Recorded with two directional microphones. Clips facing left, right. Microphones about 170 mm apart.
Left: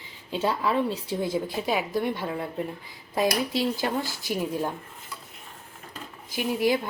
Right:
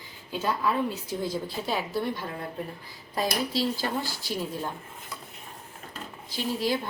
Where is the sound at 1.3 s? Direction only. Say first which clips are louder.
Left 4 dB; 15° left (ahead or behind).